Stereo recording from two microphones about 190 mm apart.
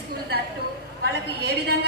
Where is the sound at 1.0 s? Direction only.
60° right (ahead or behind).